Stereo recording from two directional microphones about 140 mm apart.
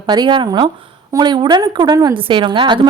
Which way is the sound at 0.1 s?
35° right (ahead or behind).